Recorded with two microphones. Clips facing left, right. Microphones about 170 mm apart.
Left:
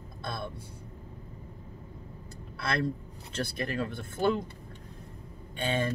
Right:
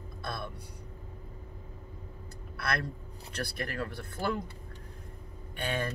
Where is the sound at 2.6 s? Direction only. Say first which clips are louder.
Left 4 dB; 25° left (ahead or behind).